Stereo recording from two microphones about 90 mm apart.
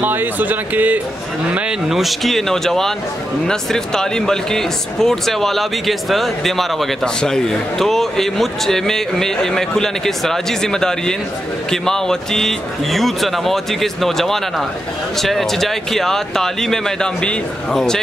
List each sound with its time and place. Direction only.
0.0 s speech: 20° right (ahead or behind)
1.9 s speech: centre (ahead or behind)